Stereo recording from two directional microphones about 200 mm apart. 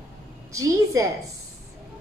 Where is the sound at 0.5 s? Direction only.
15° right (ahead or behind).